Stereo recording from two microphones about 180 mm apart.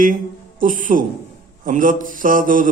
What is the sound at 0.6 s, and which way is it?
Mantra, 45° right (ahead or behind).